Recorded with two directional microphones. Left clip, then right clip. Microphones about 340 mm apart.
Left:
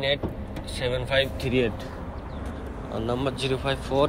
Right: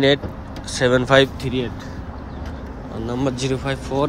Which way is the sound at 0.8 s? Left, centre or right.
Right.